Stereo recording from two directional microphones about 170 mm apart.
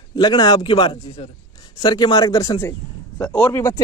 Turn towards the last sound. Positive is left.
turn(degrees=15)  # may be behind; listen again after turning